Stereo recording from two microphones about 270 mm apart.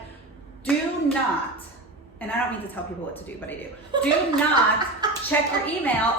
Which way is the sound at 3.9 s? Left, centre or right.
Centre.